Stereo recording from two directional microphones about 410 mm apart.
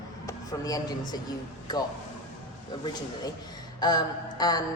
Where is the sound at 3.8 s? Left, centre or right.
Centre.